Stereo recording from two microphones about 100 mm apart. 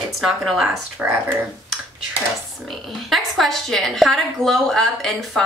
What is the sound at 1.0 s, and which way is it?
Speech, 20° right (ahead or behind).